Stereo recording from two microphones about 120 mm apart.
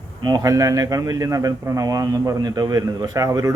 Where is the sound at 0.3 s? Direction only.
25° right (ahead or behind).